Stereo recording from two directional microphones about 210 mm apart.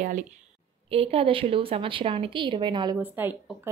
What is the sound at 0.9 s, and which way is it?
Speech, 25° right (ahead or behind).